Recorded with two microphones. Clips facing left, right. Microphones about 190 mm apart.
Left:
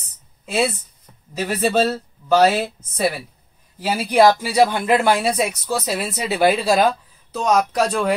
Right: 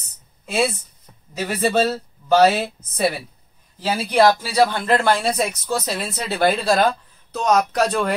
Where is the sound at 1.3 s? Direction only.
Centre (ahead or behind).